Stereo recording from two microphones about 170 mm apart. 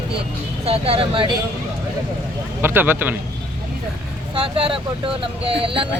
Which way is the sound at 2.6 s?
15° right (ahead or behind).